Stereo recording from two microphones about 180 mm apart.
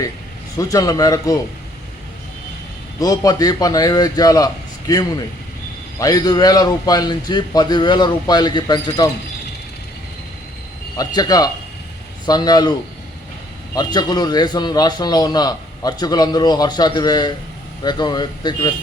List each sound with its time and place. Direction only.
0.5 s a man's voice: 20° left (ahead or behind)
3.0 s a man's voice: 20° left (ahead or behind)
6.0 s a man's voice: 20° left (ahead or behind)
10.9 s a man's voice: 20° left (ahead or behind)
13.7 s a man's voice: 25° left (ahead or behind)